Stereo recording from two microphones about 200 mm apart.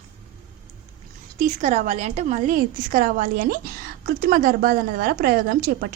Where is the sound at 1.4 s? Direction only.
35° right (ahead or behind).